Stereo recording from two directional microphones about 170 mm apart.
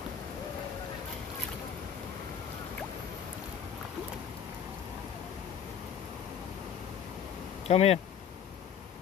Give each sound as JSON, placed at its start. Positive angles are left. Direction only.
{"t": 7.6, "sound": "speech", "side_deg": 35}